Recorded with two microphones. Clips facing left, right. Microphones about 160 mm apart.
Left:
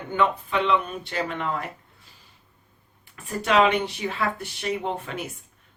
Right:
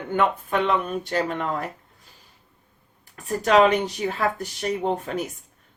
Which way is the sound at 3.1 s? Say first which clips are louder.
Right 3 dB; 40° right (ahead or behind).